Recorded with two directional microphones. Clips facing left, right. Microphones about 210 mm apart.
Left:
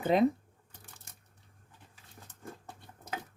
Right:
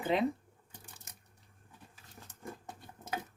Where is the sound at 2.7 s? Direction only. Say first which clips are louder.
Right 1 dB; 20° right (ahead or behind).